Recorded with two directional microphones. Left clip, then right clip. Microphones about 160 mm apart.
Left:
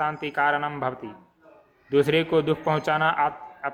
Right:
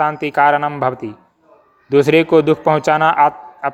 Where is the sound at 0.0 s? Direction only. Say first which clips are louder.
Right 10 dB; 45° right (ahead or behind).